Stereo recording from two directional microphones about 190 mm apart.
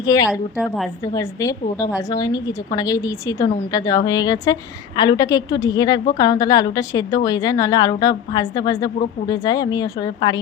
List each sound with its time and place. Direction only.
0.0 s a woman's voice: 20° left (ahead or behind)
0.3 s a woman's voice: 5° right (ahead or behind)
1.0 s a woman's voice: 15° left (ahead or behind)